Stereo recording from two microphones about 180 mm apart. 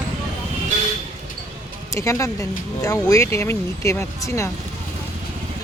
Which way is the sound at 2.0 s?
15° left (ahead or behind).